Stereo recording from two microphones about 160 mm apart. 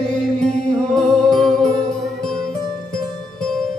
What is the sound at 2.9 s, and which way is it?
Music, 5° left (ahead or behind).